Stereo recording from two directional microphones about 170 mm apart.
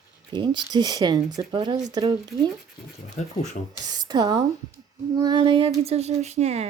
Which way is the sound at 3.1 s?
45° left (ahead or behind).